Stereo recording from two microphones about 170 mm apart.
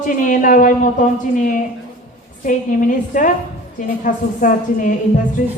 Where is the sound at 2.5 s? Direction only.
50° left (ahead or behind).